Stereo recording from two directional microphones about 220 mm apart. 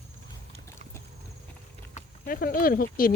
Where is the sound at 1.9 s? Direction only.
40° left (ahead or behind).